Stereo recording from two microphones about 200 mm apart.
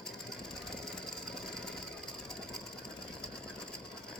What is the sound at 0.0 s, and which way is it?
Jackhammer, 5° left (ahead or behind).